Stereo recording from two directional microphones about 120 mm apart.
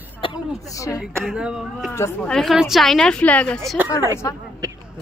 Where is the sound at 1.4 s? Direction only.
5° right (ahead or behind); by 3.6 s 10° left (ahead or behind).